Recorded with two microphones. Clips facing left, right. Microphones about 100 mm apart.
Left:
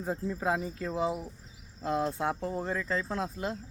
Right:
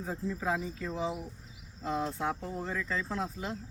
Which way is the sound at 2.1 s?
35° left (ahead or behind).